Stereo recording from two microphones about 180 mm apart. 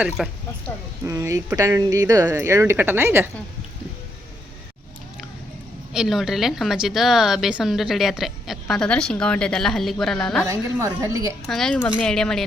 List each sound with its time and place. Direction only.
0.2 s a woman's voice: centre (ahead or behind)
1.0 s speech: 15° right (ahead or behind)
5.9 s a woman's voice: centre (ahead or behind)
10.4 s speech: 15° right (ahead or behind)
11.4 s a woman's voice: centre (ahead or behind)